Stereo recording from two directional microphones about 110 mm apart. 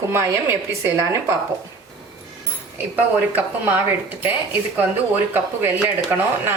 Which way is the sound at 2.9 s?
15° right (ahead or behind).